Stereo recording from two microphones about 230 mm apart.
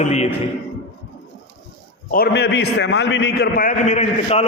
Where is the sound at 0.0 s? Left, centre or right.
Left.